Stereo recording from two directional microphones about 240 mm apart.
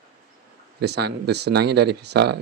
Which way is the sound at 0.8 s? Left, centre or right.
Right.